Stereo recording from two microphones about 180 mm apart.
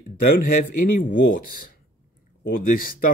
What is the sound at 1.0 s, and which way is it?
Speech, 50° left (ahead or behind).